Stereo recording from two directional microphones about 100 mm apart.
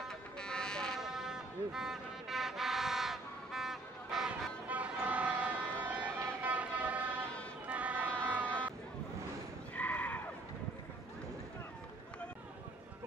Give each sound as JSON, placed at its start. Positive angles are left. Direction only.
{"t": 0.4, "sound": "vehicle", "side_deg": 5}
{"t": 1.0, "sound": "vehicle", "side_deg": -5}
{"t": 4.6, "sound": "vehicle", "side_deg": -15}
{"t": 8.2, "sound": "a sound", "side_deg": -15}
{"t": 9.8, "sound": "neigh", "side_deg": 15}